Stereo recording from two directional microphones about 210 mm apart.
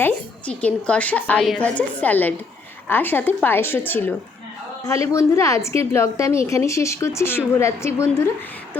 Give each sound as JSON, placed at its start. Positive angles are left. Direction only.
{"t": 0.0, "sound": "a woman's voice", "side_deg": 5}